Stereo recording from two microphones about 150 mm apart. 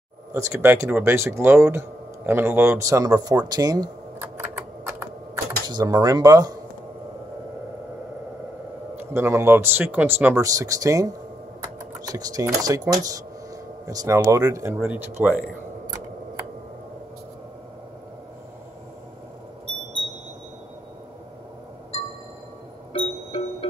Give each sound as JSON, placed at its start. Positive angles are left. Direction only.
{"t": 0.3, "sound": "speech", "side_deg": -15}
{"t": 5.7, "sound": "speech", "side_deg": -25}
{"t": 8.9, "sound": "speech", "side_deg": -15}
{"t": 22.9, "sound": "music", "side_deg": 40}